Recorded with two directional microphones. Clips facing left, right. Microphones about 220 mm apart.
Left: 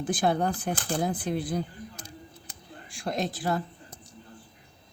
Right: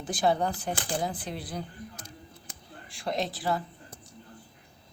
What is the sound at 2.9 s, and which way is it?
Speech, 45° left (ahead or behind).